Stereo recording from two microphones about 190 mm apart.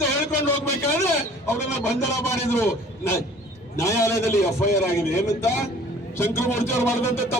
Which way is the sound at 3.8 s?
15° left (ahead or behind).